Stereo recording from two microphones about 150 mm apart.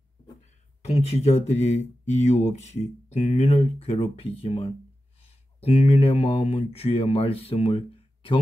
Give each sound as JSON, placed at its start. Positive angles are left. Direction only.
{"t": 0.8, "sound": "speech", "side_deg": 45}